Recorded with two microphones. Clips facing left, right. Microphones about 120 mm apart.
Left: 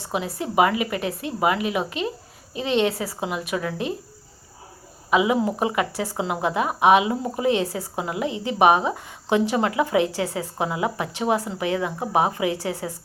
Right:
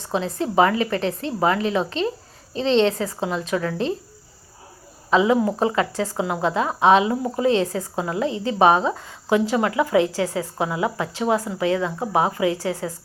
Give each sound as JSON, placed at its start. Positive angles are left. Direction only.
{"t": 0.3, "sound": "speech", "side_deg": 15}
{"t": 5.1, "sound": "speech", "side_deg": 15}